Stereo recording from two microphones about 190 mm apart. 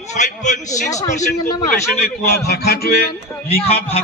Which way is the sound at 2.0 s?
55° left (ahead or behind).